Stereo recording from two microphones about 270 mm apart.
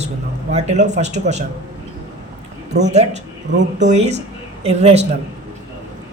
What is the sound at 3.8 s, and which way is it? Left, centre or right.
A man's voice, right.